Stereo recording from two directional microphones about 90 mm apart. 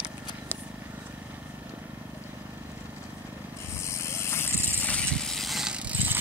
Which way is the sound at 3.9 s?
30° left (ahead or behind).